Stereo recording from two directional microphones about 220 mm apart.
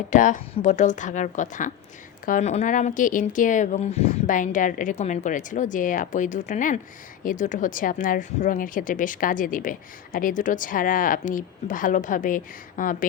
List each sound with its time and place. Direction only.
0.1 s a woman's voice: 35° left (ahead or behind)